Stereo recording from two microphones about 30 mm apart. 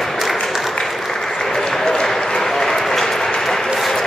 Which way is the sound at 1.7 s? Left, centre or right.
Centre.